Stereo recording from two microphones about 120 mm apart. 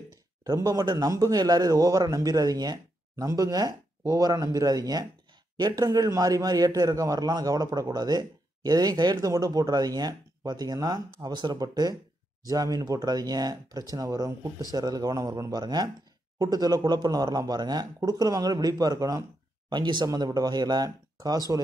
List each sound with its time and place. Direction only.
0.4 s a man's voice: 30° right (ahead or behind)